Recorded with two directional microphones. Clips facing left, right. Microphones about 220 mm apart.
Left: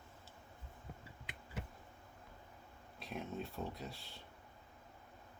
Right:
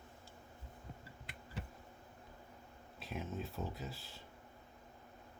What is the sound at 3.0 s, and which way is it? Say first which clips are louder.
Speech: even; centre (ahead or behind).